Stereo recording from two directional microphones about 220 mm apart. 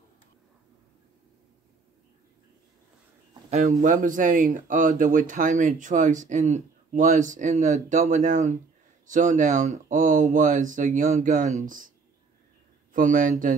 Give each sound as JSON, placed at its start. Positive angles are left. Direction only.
{"t": 3.4, "sound": "speech", "side_deg": -30}
{"t": 12.9, "sound": "speech", "side_deg": -35}